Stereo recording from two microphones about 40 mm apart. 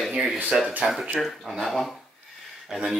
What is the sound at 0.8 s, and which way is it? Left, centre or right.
Speech, right.